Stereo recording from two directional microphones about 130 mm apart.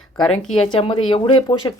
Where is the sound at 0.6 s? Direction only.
40° left (ahead or behind).